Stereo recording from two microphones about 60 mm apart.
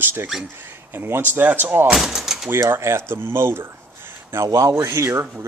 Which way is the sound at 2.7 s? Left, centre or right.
Right.